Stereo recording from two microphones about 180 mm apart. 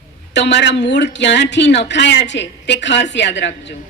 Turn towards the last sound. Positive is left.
turn(degrees=75)  # may be behind; listen again after turning